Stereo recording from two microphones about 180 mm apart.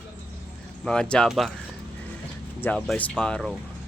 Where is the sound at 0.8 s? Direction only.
5° left (ahead or behind).